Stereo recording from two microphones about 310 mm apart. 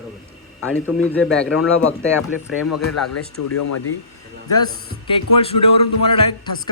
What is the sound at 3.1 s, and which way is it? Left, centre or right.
Speech, left.